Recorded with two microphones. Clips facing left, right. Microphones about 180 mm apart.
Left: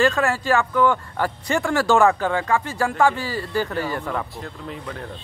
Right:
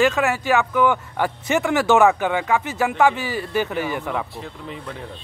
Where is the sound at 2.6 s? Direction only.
20° right (ahead or behind).